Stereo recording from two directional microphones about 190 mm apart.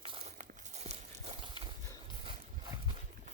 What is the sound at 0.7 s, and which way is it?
Clip-clop, 35° right (ahead or behind).